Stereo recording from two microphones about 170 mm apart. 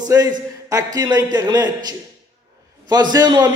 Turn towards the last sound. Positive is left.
turn(degrees=-25)  # may be behind; listen again after turning